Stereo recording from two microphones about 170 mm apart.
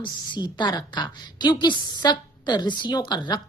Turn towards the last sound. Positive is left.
turn(degrees=25)  # may be behind; listen again after turning